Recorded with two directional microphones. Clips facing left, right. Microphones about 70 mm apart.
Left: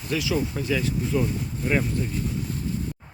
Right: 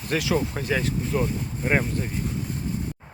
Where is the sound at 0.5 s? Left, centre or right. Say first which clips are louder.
Even; right.